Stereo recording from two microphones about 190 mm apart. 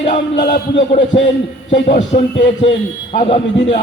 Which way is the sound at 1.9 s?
35° left (ahead or behind).